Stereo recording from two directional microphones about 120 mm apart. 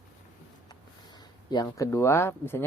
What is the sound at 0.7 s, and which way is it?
Speech, 35° left (ahead or behind).